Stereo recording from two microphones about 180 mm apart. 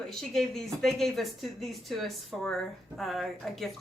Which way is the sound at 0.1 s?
Centre (ahead or behind).